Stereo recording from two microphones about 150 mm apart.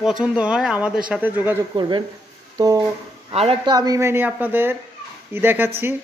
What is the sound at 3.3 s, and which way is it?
Speech, 40° right (ahead or behind).